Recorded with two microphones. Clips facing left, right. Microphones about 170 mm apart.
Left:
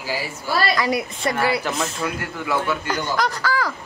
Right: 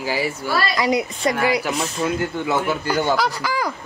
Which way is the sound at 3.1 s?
5° right (ahead or behind).